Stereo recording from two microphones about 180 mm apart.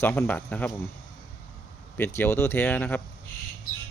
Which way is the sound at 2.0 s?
10° left (ahead or behind).